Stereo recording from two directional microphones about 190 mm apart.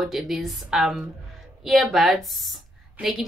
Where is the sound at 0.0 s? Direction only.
Centre (ahead or behind).